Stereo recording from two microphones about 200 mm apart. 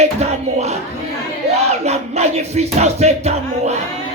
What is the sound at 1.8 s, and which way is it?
Speech, 35° right (ahead or behind).